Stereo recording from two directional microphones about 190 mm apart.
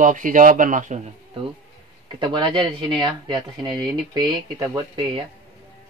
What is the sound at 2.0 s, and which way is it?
Speech, 25° right (ahead or behind).